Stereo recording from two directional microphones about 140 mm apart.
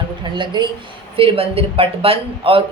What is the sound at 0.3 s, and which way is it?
Speech, 35° right (ahead or behind).